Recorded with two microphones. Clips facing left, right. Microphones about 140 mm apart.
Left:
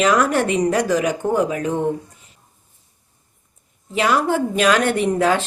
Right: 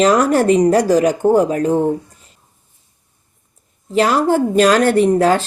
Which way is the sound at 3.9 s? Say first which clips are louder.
Right 4 dB; 35° right (ahead or behind).